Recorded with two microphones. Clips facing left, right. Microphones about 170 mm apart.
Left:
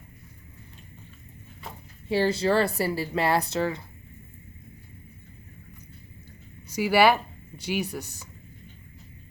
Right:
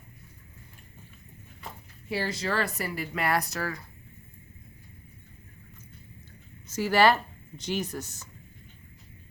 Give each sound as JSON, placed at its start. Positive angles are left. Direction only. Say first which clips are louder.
{"t": 2.0, "sound": "speech", "louder": "left 8 dB", "side_deg": 30}
{"t": 6.7, "sound": "speech", "louder": "left 2 dB", "side_deg": 10}